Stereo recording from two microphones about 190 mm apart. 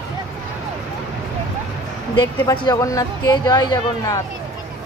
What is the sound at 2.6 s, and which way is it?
A woman's voice, 20° left (ahead or behind).